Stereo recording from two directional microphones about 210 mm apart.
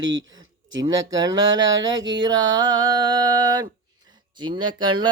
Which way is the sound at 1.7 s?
60° right (ahead or behind).